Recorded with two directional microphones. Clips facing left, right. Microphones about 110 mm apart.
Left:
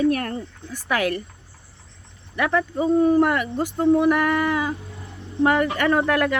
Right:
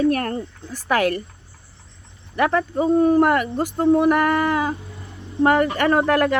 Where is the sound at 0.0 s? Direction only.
45° right (ahead or behind).